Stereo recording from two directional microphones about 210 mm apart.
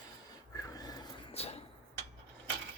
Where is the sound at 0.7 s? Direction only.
15° left (ahead or behind).